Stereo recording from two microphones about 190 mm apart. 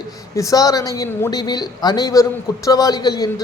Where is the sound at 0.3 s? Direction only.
20° left (ahead or behind).